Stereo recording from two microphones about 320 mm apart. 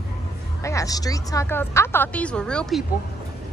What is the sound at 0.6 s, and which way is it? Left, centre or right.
A woman's voice, centre.